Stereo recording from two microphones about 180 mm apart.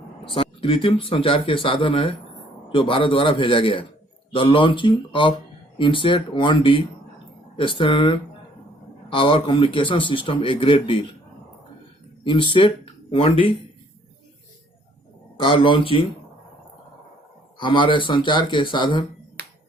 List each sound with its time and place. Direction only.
0.3 s speech: 30° left (ahead or behind)
12.2 s speech: 25° left (ahead or behind)
15.4 s speech: 30° left (ahead or behind)
17.6 s speech: 30° left (ahead or behind)
19.4 s music: 65° right (ahead or behind)